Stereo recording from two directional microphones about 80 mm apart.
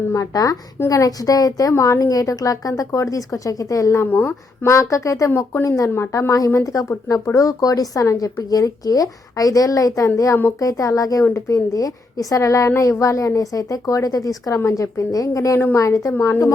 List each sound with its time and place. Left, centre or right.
0.1 s a woman's voice: left
4.0 s speech: left
4.6 s a woman's voice: left